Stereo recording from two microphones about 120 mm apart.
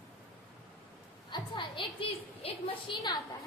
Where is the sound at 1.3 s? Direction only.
45° left (ahead or behind).